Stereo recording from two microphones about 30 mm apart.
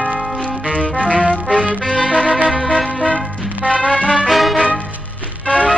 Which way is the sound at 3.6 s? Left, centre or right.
Left.